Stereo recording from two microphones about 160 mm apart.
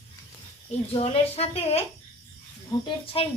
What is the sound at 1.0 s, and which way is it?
Speech, 40° left (ahead or behind).